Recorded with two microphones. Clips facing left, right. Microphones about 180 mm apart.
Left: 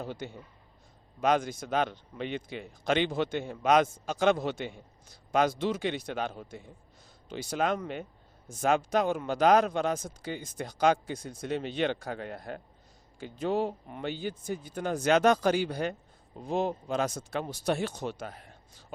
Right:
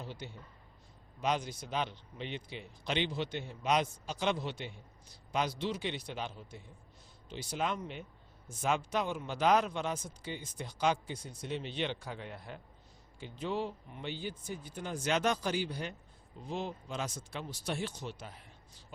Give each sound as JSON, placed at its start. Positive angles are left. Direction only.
{"t": 0.0, "sound": "speech", "side_deg": 50}